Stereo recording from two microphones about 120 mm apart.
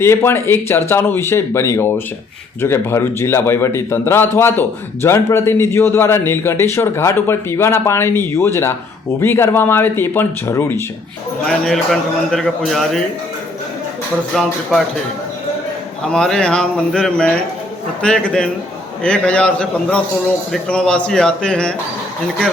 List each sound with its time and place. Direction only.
0.0 s a man's voice: 20° left (ahead or behind)
11.4 s a man's voice: 5° left (ahead or behind)
14.3 s a man's voice: centre (ahead or behind)
16.1 s a man's voice: 5° left (ahead or behind)